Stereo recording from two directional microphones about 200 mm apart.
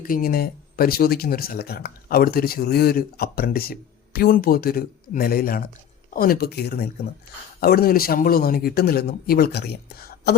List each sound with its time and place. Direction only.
0.0 s speech: 45° left (ahead or behind)